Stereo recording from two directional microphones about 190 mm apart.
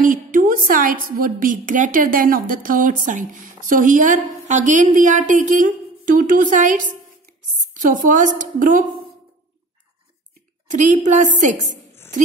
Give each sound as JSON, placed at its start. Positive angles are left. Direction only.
{"t": 0.0, "sound": "a woman's voice", "side_deg": -45}
{"t": 10.7, "sound": "a woman's voice", "side_deg": -40}